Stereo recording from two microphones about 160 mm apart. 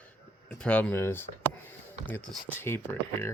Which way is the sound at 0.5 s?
10° left (ahead or behind).